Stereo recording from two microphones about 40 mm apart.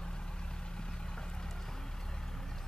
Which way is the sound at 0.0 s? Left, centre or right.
Left.